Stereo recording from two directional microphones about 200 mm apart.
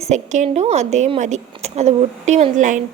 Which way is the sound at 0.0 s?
35° right (ahead or behind).